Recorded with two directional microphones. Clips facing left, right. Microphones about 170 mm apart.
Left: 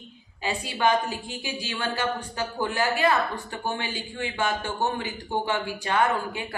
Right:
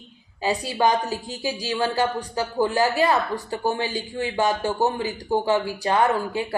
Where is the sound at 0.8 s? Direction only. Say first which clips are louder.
Right 1 dB; 35° right (ahead or behind).